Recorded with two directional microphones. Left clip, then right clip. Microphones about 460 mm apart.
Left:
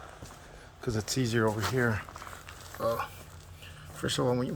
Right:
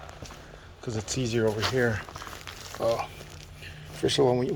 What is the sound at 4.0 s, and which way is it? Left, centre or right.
Speech, centre.